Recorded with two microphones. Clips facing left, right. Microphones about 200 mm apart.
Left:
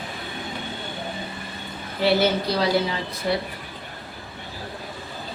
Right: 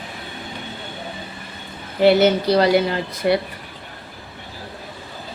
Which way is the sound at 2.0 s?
65° right (ahead or behind).